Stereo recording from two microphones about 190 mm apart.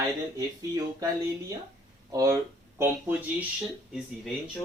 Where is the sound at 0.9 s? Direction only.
20° right (ahead or behind).